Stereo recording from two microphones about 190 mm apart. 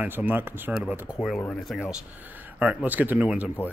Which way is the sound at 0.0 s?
10° right (ahead or behind).